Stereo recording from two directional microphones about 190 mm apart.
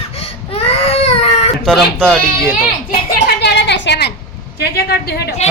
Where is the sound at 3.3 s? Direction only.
65° left (ahead or behind).